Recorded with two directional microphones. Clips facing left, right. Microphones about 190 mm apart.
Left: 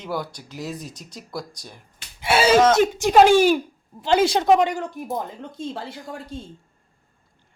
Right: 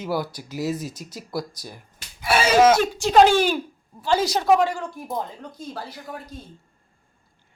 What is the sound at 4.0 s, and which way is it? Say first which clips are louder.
A woman's voice: left 3 dB; 20° left (ahead or behind).